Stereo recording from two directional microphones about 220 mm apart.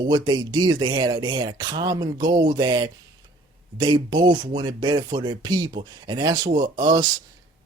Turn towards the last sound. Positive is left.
turn(degrees=-20)  # may be behind; listen again after turning